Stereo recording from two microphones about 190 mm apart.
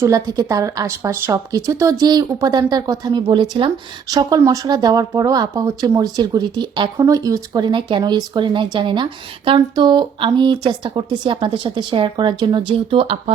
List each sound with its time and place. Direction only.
0.0 s speech: 20° right (ahead or behind)